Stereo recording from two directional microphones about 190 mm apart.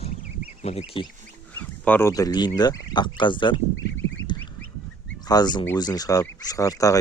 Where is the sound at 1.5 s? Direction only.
10° left (ahead or behind); by 3.6 s 25° left (ahead or behind).